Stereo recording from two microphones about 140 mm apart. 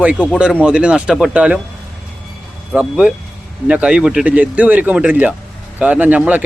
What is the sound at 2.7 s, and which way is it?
Speech, 10° right (ahead or behind).